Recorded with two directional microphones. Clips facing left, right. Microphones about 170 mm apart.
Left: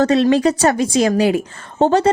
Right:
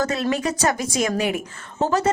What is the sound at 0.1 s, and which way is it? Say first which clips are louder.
Speech: left 9 dB; 30° left (ahead or behind).